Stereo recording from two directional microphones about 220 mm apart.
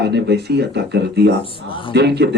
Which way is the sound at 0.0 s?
50° right (ahead or behind).